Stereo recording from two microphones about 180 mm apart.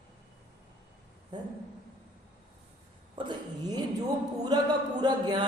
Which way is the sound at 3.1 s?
25° right (ahead or behind).